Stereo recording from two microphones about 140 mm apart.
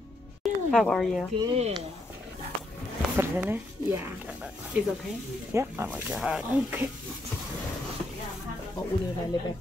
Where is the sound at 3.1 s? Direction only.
15° right (ahead or behind).